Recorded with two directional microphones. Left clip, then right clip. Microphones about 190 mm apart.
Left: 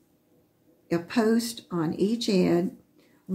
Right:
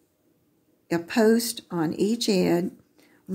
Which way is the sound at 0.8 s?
45° right (ahead or behind).